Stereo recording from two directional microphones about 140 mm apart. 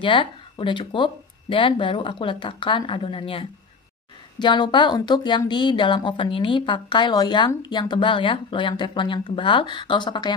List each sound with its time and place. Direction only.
0.0 s a woman's voice: 35° left (ahead or behind)